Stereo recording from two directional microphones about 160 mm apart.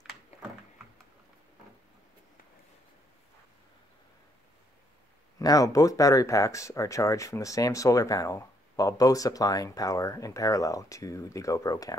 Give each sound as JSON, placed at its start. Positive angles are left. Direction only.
{"t": 5.4, "sound": "speech", "side_deg": 20}